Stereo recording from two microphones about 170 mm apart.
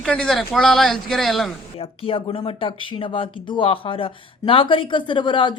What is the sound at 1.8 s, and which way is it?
Speech, 30° left (ahead or behind).